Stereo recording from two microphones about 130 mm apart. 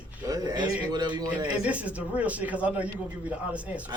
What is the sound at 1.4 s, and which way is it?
Speech, 10° right (ahead or behind).